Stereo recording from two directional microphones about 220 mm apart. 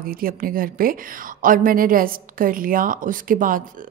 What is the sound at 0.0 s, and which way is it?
Speech, 40° right (ahead or behind).